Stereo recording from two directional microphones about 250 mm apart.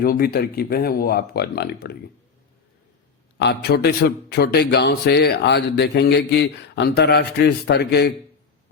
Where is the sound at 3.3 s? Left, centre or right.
Left.